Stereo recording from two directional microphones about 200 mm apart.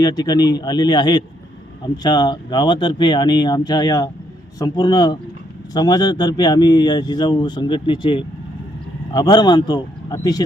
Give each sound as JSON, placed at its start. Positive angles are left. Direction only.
{"t": 0.0, "sound": "speech", "side_deg": 20}